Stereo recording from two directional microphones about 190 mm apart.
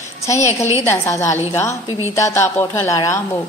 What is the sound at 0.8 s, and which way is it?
A woman's voice, 15° left (ahead or behind).